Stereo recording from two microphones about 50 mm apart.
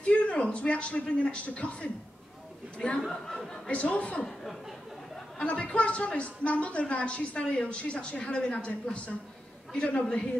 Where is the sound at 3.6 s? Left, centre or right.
Left.